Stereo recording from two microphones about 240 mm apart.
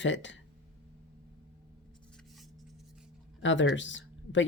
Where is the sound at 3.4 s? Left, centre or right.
Left.